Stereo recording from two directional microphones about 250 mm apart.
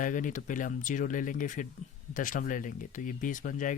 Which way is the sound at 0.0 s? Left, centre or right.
Left.